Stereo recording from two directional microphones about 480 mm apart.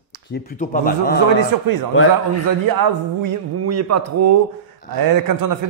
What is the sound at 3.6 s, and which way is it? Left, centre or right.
A man's voice, right.